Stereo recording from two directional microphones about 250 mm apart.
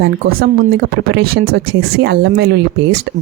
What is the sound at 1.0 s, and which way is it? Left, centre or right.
Speech, right.